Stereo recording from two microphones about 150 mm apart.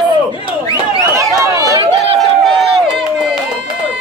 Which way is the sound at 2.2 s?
Centre (ahead or behind).